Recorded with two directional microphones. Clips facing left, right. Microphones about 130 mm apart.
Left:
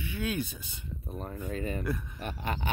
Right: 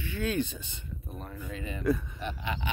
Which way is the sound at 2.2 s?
45° left (ahead or behind).